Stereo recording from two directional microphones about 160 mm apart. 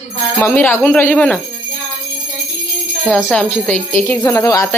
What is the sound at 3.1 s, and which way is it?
A woman's voice, centre (ahead or behind).